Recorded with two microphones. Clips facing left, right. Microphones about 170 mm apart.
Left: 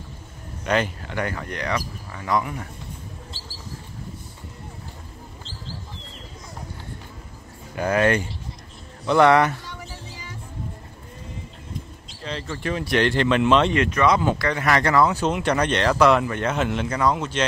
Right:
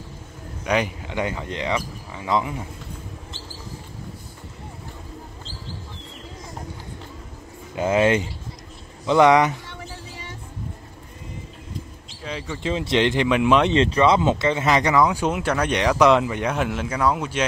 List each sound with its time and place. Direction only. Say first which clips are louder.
0.7 s speech: even; 15° right (ahead or behind)
7.7 s speech: right 1 dB; 20° right (ahead or behind)
12.2 s speech: even; 10° right (ahead or behind)
12.5 s speech: right 1 dB; 20° right (ahead or behind)
13.7 s speech: right 2 dB; 30° right (ahead or behind); by 17.5 s 10° right (ahead or behind)